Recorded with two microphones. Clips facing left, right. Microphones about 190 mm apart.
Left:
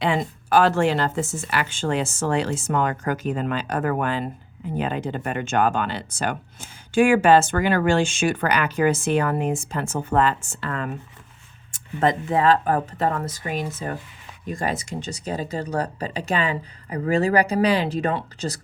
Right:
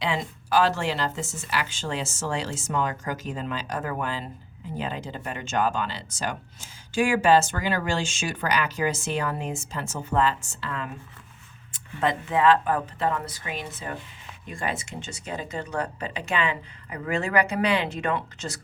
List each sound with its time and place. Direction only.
0.0 s speech: 50° left (ahead or behind); by 18.6 s 35° left (ahead or behind)